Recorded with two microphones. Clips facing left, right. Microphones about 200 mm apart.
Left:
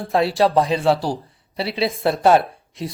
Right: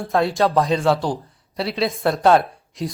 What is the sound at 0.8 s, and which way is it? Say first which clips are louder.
Speech: left 1 dB; 30° left (ahead or behind).